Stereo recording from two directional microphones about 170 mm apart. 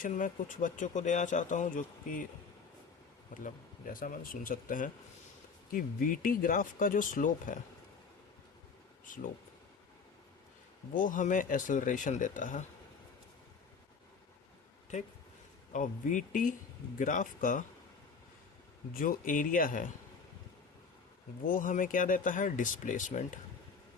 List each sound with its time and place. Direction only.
0.0 s speech: 50° left (ahead or behind)
3.4 s speech: 55° left (ahead or behind)
9.0 s speech: 50° left (ahead or behind)
10.9 s speech: 50° left (ahead or behind)
15.7 s speech: 50° left (ahead or behind)
18.9 s speech: 55° left (ahead or behind)
21.4 s speech: 50° left (ahead or behind)